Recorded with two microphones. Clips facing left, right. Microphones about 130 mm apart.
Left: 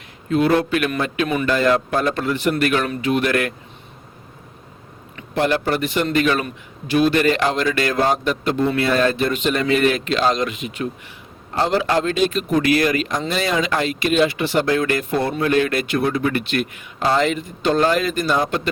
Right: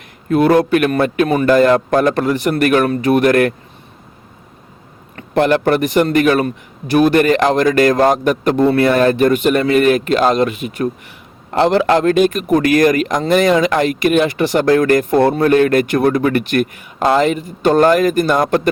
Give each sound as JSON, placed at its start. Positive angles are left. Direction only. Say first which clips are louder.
{"t": 0.3, "sound": "speech", "louder": "right 5 dB", "side_deg": -45}
{"t": 1.9, "sound": "a man's voice", "louder": "right 7 dB", "side_deg": -60}
{"t": 2.6, "sound": "speech", "louder": "right 6 dB", "side_deg": -45}
{"t": 5.1, "sound": "speech", "louder": "right 6 dB", "side_deg": -55}
{"t": 7.9, "sound": "speech", "louder": "right 6 dB", "side_deg": -55}
{"t": 11.5, "sound": "speech", "louder": "right 6 dB", "side_deg": -65}